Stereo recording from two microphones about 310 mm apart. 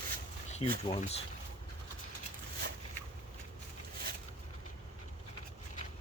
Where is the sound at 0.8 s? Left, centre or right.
Centre.